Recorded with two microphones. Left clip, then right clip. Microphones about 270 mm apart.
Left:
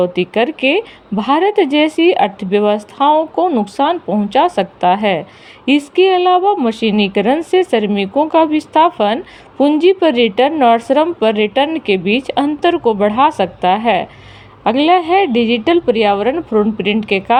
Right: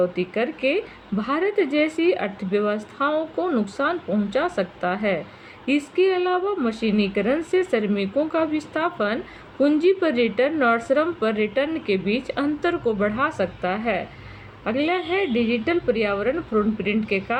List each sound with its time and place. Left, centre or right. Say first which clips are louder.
0.0 s a woman's voice: left 8 dB; left